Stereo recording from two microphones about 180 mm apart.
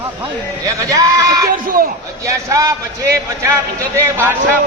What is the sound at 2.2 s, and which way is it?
Speech, 20° right (ahead or behind).